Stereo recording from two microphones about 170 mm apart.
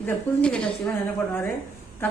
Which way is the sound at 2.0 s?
10° left (ahead or behind).